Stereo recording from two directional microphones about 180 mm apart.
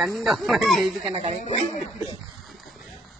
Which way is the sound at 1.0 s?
40° right (ahead or behind).